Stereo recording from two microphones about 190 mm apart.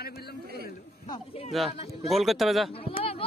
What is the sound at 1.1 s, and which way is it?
Speech, 30° left (ahead or behind).